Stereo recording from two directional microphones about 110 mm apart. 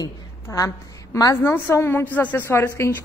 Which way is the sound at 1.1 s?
30° left (ahead or behind).